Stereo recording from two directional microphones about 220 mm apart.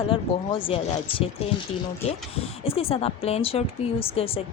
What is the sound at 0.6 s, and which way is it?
A woman's voice, 25° left (ahead or behind).